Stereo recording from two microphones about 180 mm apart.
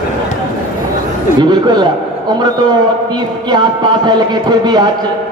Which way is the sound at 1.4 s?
25° right (ahead or behind).